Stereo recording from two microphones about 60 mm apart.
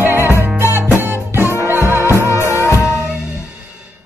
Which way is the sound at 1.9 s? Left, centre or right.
Right.